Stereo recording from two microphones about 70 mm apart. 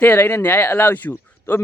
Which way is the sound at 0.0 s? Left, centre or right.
Left.